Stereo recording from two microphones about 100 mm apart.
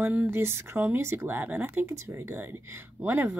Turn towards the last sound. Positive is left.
turn(degrees=-15)  # may be behind; listen again after turning